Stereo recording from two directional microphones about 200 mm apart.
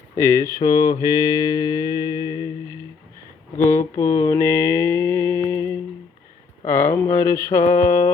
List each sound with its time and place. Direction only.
0.2 s mantra: 15° left (ahead or behind)
3.6 s mantra: 15° left (ahead or behind)